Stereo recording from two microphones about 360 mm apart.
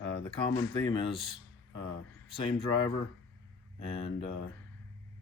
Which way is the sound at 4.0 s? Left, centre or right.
Centre.